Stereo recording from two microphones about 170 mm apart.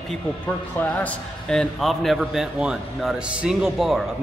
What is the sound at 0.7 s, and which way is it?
A man's voice, 10° left (ahead or behind).